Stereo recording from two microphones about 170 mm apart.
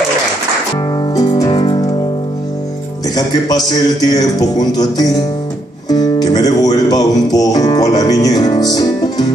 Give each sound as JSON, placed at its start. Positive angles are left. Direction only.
{"t": 1.1, "sound": "music", "side_deg": 25}
{"t": 3.2, "sound": "a man's voice", "side_deg": 20}
{"t": 5.9, "sound": "music", "side_deg": 25}